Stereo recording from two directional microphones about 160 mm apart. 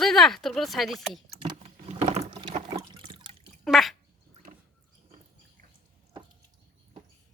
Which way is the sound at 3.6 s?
Centre (ahead or behind).